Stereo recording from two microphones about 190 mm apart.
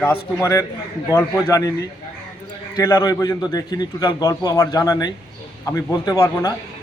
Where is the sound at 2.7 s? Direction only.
20° left (ahead or behind).